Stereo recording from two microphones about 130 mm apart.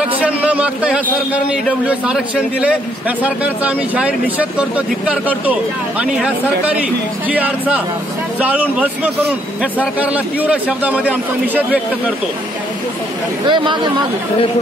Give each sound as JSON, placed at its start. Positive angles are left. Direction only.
{"t": 0.2, "sound": "a man's voice", "side_deg": -10}
{"t": 3.2, "sound": "speech", "side_deg": -10}
{"t": 13.5, "sound": "speech", "side_deg": -40}